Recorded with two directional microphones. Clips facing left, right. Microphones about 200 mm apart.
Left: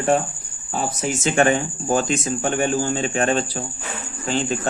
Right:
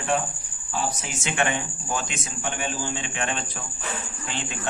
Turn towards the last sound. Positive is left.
turn(degrees=40)  # may be behind; listen again after turning